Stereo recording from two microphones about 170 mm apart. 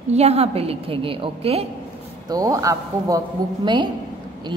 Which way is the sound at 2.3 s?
20° right (ahead or behind).